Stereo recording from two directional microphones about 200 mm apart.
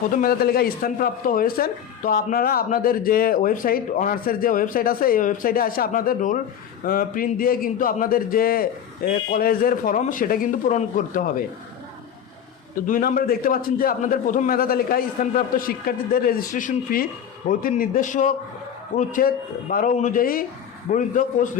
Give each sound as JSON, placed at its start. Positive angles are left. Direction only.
{"t": 0.2, "sound": "speech", "side_deg": 50}
{"t": 12.9, "sound": "a man's voice", "side_deg": 45}